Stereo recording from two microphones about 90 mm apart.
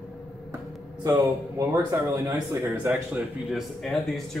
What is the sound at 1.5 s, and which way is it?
Speech, 35° right (ahead or behind).